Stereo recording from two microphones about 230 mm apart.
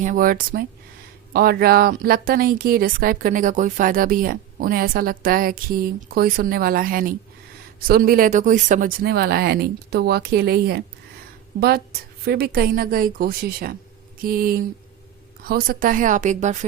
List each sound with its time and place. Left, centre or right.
0.0 s speech: right